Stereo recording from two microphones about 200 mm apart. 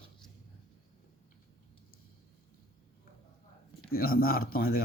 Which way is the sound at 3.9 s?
50° left (ahead or behind).